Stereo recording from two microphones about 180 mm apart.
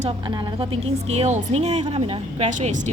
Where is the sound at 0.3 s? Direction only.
25° right (ahead or behind).